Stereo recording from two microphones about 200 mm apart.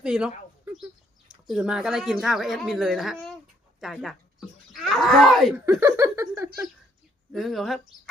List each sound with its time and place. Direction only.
0.0 s speech: 5° right (ahead or behind)
5.8 s speech: 15° right (ahead or behind)
7.3 s speech: centre (ahead or behind)